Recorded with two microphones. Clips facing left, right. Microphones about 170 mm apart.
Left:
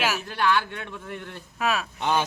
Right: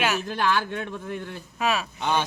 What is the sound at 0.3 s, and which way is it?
Speech, 45° right (ahead or behind).